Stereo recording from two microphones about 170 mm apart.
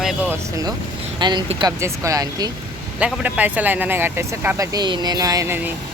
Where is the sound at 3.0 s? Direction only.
10° right (ahead or behind).